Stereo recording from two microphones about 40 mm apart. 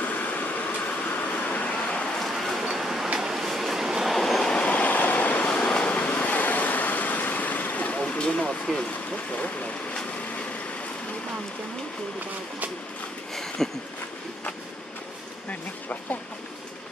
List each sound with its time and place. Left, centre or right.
0.0 s vehicle: left
2.1 s a sound: centre
3.2 s train: centre
4.5 s vehicle: left
9.1 s speech: left
13.3 s a sound: centre